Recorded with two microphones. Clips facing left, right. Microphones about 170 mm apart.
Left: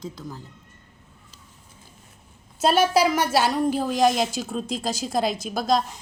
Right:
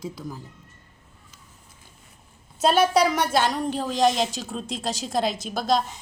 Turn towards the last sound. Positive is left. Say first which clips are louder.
# left 1 dB
turn(degrees=0)  # may be behind; listen again after turning